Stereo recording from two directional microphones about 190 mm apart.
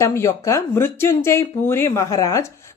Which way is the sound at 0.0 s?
15° left (ahead or behind).